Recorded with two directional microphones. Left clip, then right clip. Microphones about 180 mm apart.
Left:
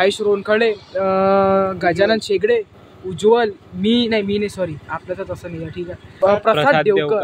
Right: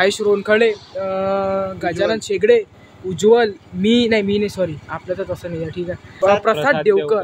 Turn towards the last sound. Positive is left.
turn(degrees=-5)  # may be behind; listen again after turning